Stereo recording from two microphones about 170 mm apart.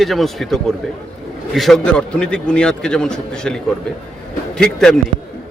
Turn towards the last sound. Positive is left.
turn(degrees=5)  # may be behind; listen again after turning